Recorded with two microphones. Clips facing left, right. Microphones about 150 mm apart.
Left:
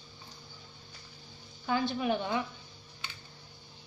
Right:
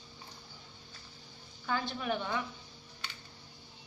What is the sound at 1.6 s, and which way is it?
Speech, 20° left (ahead or behind).